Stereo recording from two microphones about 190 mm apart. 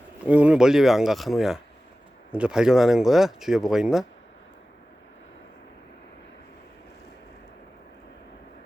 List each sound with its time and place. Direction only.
0.3 s speech: 5° right (ahead or behind)